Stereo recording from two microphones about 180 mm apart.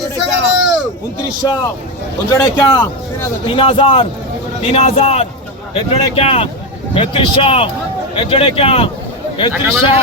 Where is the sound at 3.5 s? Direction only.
30° left (ahead or behind).